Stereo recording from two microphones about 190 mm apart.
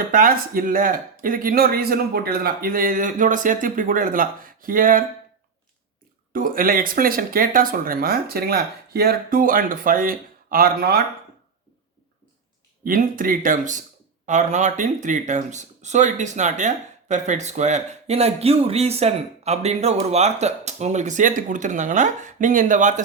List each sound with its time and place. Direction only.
0.1 s speech: 45° right (ahead or behind)
6.3 s speech: 50° right (ahead or behind)
12.8 s speech: 45° right (ahead or behind)